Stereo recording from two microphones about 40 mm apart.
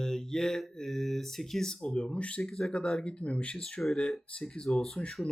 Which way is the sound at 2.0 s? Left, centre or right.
Left.